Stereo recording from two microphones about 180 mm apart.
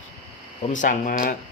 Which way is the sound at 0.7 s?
45° left (ahead or behind).